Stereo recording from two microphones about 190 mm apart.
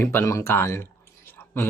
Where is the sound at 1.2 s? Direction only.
10° left (ahead or behind).